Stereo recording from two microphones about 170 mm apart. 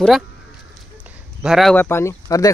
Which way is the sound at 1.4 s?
Centre (ahead or behind).